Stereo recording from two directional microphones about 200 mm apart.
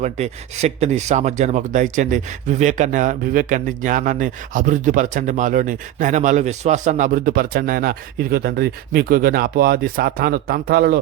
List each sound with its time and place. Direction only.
0.0 s speech: 35° right (ahead or behind); by 11.0 s 50° right (ahead or behind)